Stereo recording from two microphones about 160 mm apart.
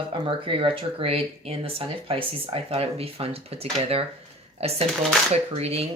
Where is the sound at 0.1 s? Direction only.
35° right (ahead or behind).